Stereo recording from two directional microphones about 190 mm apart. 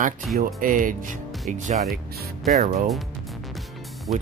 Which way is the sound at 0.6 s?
45° right (ahead or behind).